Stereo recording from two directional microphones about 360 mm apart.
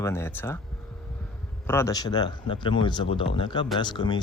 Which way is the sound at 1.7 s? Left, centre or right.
Centre.